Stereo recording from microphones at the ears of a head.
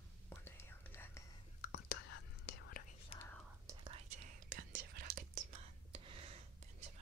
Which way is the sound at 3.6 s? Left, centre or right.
Right.